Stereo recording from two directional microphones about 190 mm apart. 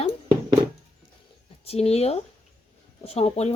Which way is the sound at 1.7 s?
35° left (ahead or behind).